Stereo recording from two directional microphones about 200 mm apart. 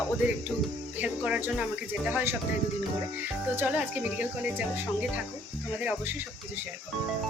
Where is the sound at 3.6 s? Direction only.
10° right (ahead or behind).